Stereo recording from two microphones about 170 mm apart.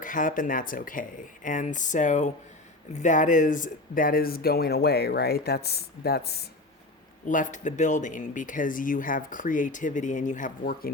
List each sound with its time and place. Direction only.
0.0 s speech: 50° left (ahead or behind); by 6.4 s 65° left (ahead or behind)
7.3 s speech: 50° left (ahead or behind)